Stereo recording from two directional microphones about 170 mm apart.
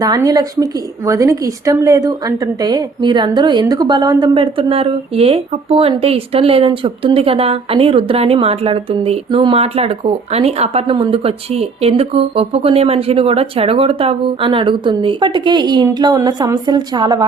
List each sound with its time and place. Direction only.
0.0 s a woman's voice: 20° right (ahead or behind)